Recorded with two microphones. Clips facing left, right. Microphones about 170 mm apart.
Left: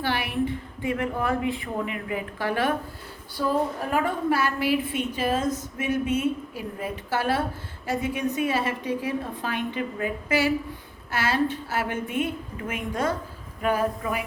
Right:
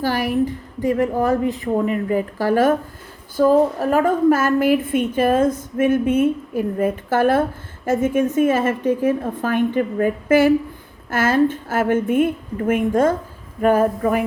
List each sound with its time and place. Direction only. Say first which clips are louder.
0.0 s a woman's voice: right 7 dB; 40° right (ahead or behind)